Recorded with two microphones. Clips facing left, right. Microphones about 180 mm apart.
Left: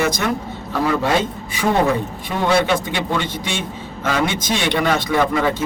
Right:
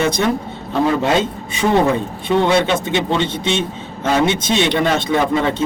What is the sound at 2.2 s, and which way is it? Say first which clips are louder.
A man's voice: right 3 dB; 25° right (ahead or behind).